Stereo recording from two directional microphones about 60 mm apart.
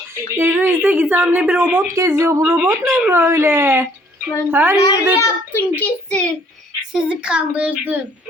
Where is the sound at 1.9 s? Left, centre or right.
Right.